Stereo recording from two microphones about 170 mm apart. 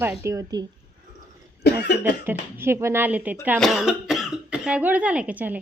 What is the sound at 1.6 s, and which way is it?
Cough, 75° left (ahead or behind).